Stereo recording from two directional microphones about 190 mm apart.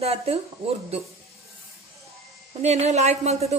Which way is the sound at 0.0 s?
30° right (ahead or behind).